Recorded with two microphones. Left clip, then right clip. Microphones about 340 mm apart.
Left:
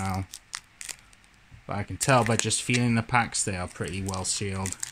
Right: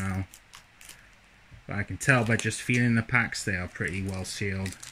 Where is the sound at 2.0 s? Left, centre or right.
Centre.